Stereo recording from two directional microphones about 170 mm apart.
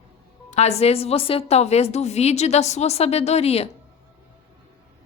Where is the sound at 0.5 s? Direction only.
40° left (ahead or behind).